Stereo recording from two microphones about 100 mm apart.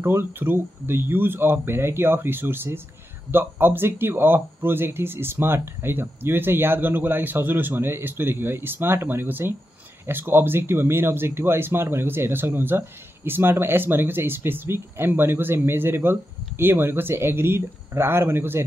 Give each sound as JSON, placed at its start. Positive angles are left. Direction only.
{"t": 0.0, "sound": "speech", "side_deg": -20}